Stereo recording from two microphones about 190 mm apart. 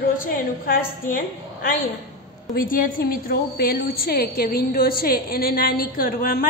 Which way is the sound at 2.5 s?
50° left (ahead or behind).